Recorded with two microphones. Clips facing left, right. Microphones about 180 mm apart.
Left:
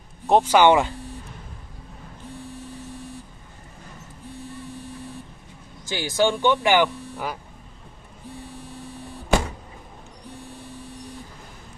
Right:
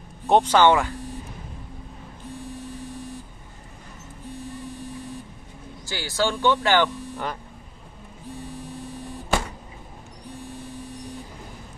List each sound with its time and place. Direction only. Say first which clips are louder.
0.3 s speech: left 1 dB; 10° left (ahead or behind)
5.9 s speech: left 4 dB; 20° left (ahead or behind)